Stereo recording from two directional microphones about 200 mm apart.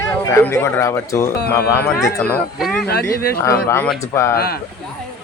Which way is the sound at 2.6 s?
Centre (ahead or behind).